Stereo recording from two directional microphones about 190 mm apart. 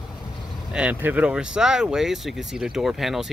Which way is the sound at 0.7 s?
5° right (ahead or behind).